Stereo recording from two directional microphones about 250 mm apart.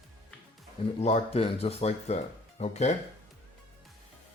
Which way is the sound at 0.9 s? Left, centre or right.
Left.